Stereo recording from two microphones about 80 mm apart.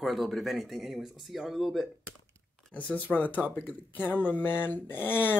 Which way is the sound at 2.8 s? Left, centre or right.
Centre.